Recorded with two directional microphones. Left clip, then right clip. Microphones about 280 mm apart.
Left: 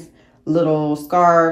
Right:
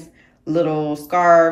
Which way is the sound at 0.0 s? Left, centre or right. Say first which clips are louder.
Left 2 dB; centre.